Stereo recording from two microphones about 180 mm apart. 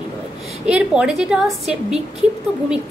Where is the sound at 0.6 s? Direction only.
5° right (ahead or behind).